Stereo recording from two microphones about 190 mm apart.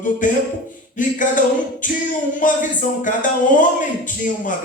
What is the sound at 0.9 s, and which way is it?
A man's voice, 45° left (ahead or behind).